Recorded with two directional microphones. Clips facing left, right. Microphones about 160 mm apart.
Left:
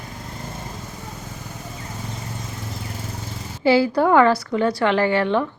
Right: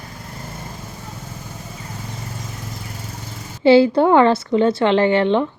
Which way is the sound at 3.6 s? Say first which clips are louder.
Right 5 dB; 25° right (ahead or behind).